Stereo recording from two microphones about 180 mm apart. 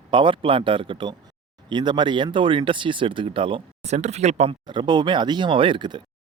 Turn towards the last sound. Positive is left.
turn(degrees=-25)  # may be behind; listen again after turning